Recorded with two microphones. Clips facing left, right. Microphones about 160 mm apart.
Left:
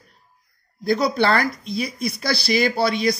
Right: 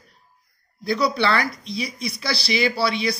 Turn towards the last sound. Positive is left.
turn(degrees=45)  # may be behind; listen again after turning